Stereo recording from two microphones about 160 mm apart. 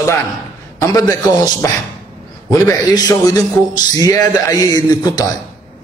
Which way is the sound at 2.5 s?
20° left (ahead or behind).